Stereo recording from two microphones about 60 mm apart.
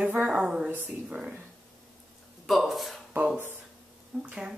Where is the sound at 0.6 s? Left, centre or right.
Right.